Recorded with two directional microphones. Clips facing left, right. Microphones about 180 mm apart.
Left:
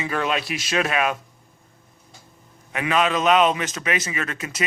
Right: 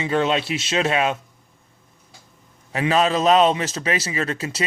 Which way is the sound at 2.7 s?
30° right (ahead or behind).